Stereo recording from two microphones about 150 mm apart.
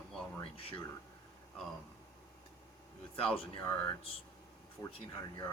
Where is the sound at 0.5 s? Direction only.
35° left (ahead or behind).